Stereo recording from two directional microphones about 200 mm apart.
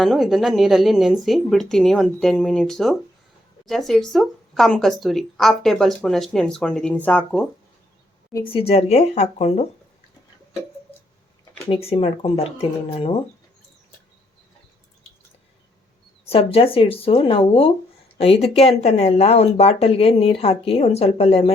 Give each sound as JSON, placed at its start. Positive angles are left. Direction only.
{"t": 0.0, "sound": "a woman's voice", "side_deg": 0}
{"t": 8.5, "sound": "speech", "side_deg": 30}
{"t": 11.7, "sound": "speech", "side_deg": 30}
{"t": 16.3, "sound": "speech", "side_deg": 30}